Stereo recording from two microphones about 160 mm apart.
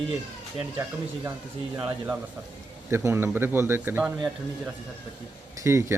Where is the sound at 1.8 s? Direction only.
10° right (ahead or behind).